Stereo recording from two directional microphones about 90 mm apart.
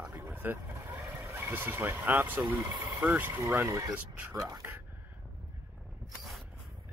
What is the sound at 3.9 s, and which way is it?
Speech, 20° right (ahead or behind).